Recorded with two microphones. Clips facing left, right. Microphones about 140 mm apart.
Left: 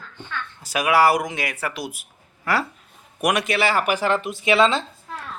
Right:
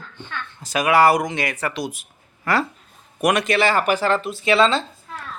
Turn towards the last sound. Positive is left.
turn(degrees=15)  # may be behind; listen again after turning